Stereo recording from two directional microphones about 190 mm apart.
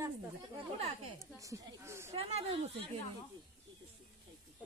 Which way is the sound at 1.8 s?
15° right (ahead or behind).